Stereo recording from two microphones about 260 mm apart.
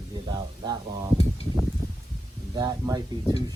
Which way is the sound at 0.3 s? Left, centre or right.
Centre.